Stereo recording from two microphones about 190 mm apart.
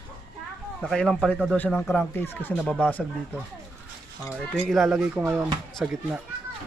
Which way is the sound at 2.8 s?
10° left (ahead or behind).